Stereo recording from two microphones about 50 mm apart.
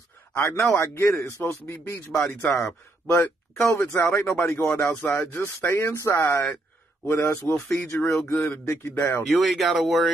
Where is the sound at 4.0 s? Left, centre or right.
Left.